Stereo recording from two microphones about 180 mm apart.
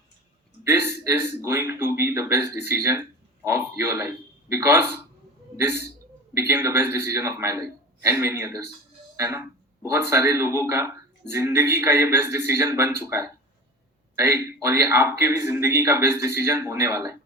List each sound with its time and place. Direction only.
0.6 s a sound: 10° right (ahead or behind)
1.4 s speech: 15° right (ahead or behind)
6.3 s speech: 15° right (ahead or behind)